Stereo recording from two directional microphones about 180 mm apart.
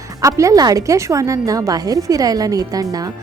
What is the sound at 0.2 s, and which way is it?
Speech, 15° right (ahead or behind).